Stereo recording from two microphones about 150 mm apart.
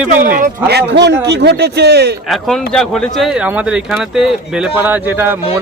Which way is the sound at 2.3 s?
5° left (ahead or behind).